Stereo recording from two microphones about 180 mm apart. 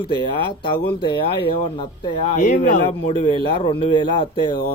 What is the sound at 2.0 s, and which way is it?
Speech, 25° left (ahead or behind).